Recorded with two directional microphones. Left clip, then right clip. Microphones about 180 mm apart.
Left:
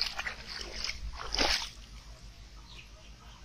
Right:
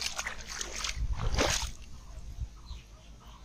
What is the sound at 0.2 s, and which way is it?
Dog, 5° right (ahead or behind).